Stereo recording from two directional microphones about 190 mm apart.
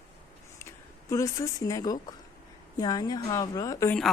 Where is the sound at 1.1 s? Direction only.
15° left (ahead or behind).